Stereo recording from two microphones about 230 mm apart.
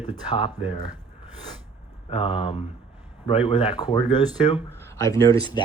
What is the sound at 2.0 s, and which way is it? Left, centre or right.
Speech, left.